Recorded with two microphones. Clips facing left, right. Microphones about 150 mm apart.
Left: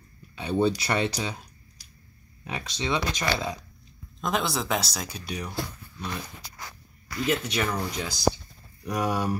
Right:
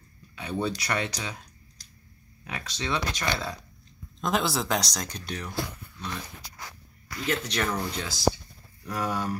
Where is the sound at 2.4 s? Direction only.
20° left (ahead or behind).